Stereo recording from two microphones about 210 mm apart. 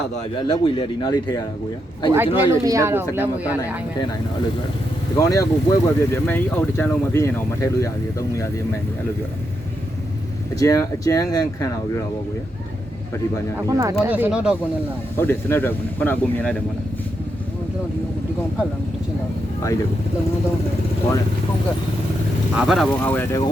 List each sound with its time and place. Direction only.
0.2 s a man's voice: 25° left (ahead or behind)
2.1 s speech: 10° right (ahead or behind)
5.1 s speech: 15° left (ahead or behind)
10.6 s speech: 15° left (ahead or behind)
13.6 s speech: 15° right (ahead or behind)
15.2 s speech: 10° left (ahead or behind)
22.5 s speech: centre (ahead or behind)